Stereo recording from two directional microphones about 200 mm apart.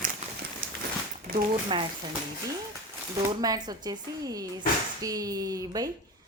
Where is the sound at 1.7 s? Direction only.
25° right (ahead or behind).